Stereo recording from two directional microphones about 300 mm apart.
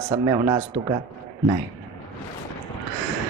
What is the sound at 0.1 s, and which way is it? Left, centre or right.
Speech, centre.